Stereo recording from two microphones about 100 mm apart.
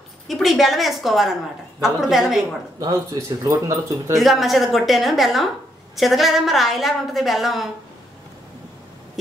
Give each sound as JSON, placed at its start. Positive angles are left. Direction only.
{"t": 0.3, "sound": "a woman's voice", "side_deg": 0}
{"t": 2.9, "sound": "speech", "side_deg": -30}
{"t": 4.2, "sound": "a woman's voice", "side_deg": 0}